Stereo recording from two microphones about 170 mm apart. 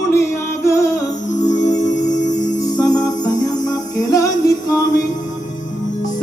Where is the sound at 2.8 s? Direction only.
20° left (ahead or behind).